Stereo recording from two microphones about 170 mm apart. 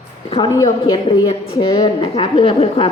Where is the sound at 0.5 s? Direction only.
25° left (ahead or behind).